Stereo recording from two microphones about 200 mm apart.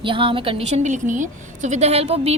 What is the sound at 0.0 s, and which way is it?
A woman's voice, 25° right (ahead or behind).